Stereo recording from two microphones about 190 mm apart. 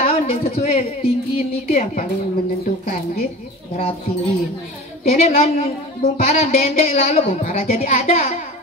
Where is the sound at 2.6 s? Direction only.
55° left (ahead or behind).